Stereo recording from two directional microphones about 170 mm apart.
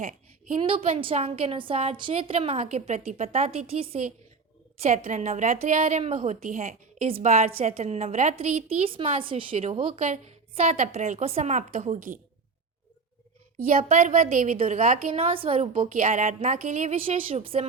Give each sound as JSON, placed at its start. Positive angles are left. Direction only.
{"t": 0.6, "sound": "a woman's voice", "side_deg": -35}
{"t": 4.8, "sound": "a woman's voice", "side_deg": -45}
{"t": 8.9, "sound": "a woman's voice", "side_deg": -30}
{"t": 13.7, "sound": "a woman's voice", "side_deg": -50}
{"t": 15.1, "sound": "a woman's voice", "side_deg": -35}
{"t": 15.7, "sound": "a woman's voice", "side_deg": -50}
{"t": 16.9, "sound": "a woman's voice", "side_deg": -35}